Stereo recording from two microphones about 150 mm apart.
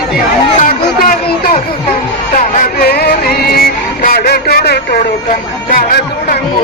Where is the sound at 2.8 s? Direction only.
90° left.